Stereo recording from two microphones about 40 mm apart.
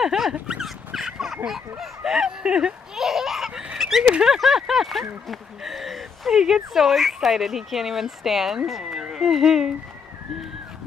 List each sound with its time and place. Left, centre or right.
0.0 s dog: centre
0.7 s fowl: centre
3.0 s a sound: centre
3.7 s honk: centre
4.4 s speech: centre